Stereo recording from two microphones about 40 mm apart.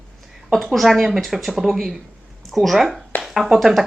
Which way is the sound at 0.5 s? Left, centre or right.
Centre.